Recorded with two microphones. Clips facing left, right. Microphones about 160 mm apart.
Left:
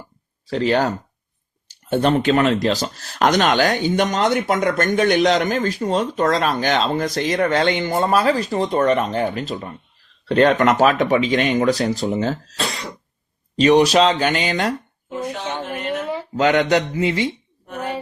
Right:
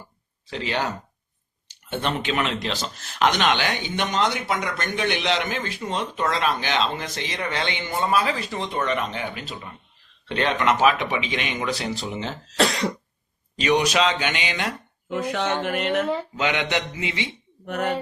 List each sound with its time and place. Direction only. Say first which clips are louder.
0.5 s speech: left 8 dB; 40° left (ahead or behind)
13.6 s speech: left 7 dB; 35° left (ahead or behind)
15.3 s speech: right 5 dB; 85° right
16.3 s speech: left 8 dB; 40° left (ahead or behind)